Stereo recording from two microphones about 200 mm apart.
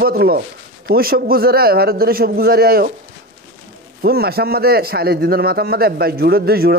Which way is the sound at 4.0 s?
50° right (ahead or behind).